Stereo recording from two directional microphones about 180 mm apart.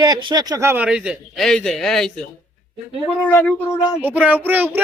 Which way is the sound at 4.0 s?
10° right (ahead or behind).